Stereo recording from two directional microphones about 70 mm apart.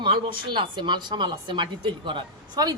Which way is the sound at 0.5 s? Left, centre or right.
Right.